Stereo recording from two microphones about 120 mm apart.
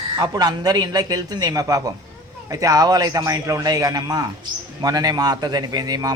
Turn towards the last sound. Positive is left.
turn(degrees=-30)  # may be behind; listen again after turning